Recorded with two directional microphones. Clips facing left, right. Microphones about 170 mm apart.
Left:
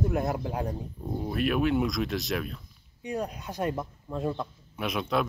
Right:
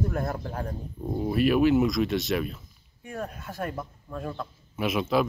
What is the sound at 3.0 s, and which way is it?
Speech, 20° left (ahead or behind).